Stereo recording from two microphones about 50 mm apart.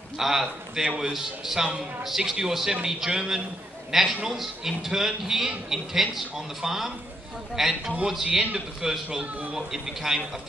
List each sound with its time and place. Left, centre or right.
0.2 s a man's voice: centre
0.8 s a man's voice: centre
1.1 s a man's voice: centre
9.2 s speech: right
9.6 s a man's voice: centre